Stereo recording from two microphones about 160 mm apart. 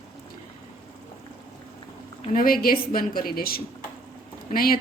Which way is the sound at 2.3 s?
65° left (ahead or behind).